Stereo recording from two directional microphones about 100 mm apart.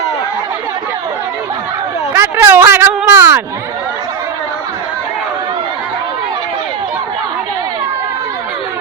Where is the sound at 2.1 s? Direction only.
25° right (ahead or behind).